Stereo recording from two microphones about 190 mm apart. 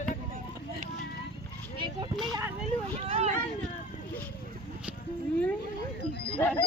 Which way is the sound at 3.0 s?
30° right (ahead or behind).